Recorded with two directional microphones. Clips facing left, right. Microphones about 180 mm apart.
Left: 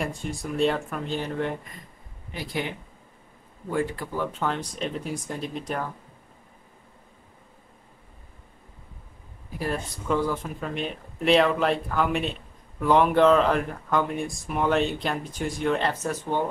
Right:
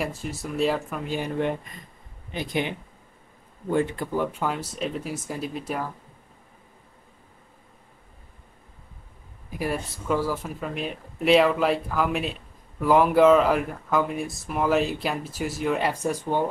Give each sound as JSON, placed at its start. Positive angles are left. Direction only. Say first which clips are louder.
{"t": 0.0, "sound": "speech", "louder": "even", "side_deg": -5}
{"t": 3.7, "sound": "speech", "louder": "right 3 dB", "side_deg": -20}
{"t": 9.6, "sound": "speech", "louder": "right 1 dB", "side_deg": -5}